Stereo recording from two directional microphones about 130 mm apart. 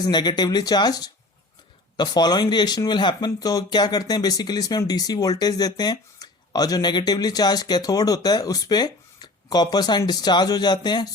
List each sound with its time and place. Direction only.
0.0 s speech: 35° left (ahead or behind)